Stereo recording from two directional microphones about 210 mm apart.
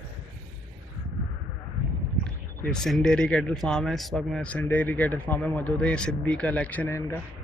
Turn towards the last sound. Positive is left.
turn(degrees=10)  # may be behind; listen again after turning